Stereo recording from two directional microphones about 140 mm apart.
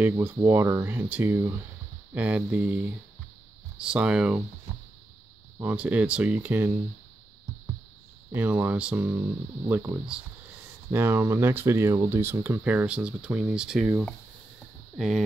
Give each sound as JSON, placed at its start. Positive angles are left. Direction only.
{"t": 0.0, "sound": "speech", "side_deg": -15}
{"t": 5.6, "sound": "speech", "side_deg": -10}
{"t": 8.3, "sound": "speech", "side_deg": -15}